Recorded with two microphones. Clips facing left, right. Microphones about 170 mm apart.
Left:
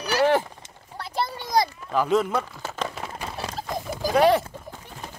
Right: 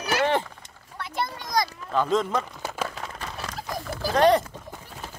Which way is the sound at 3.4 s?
25° left (ahead or behind).